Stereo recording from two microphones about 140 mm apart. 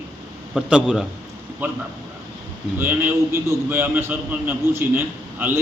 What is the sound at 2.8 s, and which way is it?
A man's voice, 15° right (ahead or behind).